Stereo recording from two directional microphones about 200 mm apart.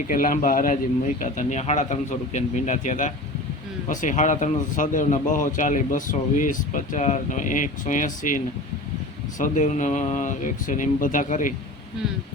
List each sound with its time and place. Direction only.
0.1 s a man's voice: 45° left (ahead or behind)
9.4 s a man's voice: 35° left (ahead or behind)